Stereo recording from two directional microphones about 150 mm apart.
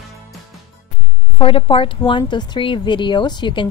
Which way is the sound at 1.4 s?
35° left (ahead or behind).